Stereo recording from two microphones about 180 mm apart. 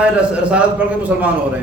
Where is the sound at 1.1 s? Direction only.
10° right (ahead or behind).